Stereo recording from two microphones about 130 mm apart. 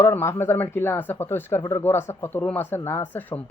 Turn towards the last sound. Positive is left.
turn(degrees=20)  # may be behind; listen again after turning